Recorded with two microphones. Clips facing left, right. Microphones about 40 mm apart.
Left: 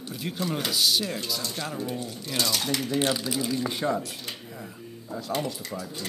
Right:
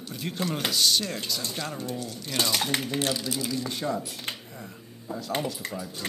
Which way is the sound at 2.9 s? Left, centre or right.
Centre.